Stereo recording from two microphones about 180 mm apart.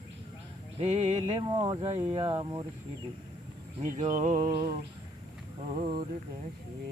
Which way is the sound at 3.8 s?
45° right (ahead or behind).